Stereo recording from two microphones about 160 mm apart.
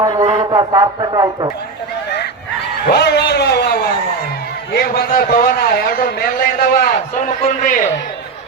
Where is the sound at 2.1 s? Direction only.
90° left.